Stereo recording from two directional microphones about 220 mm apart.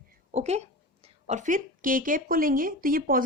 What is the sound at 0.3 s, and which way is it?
A woman's voice, 30° right (ahead or behind).